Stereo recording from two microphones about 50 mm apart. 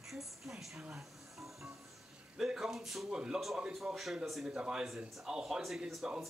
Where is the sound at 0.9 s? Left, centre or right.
Centre.